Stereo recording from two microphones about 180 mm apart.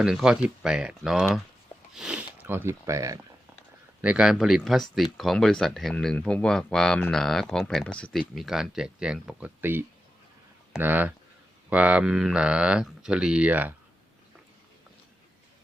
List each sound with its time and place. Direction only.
0.0 s speech: 5° right (ahead or behind)
4.0 s speech: 5° right (ahead or behind)